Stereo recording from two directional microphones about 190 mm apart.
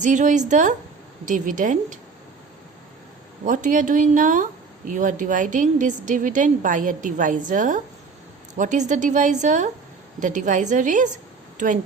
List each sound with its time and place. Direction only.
0.0 s a woman's voice: 40° right (ahead or behind)
3.4 s a woman's voice: 45° right (ahead or behind)